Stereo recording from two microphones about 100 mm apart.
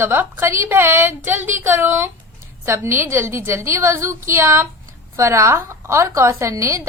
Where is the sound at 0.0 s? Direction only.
20° right (ahead or behind).